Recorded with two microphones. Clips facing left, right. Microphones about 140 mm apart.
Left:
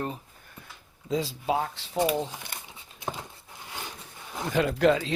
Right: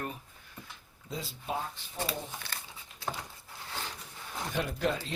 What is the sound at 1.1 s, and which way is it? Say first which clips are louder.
Speech: left 9 dB; 90° left.